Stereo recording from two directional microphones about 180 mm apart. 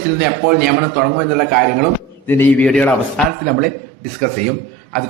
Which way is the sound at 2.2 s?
10° left (ahead or behind).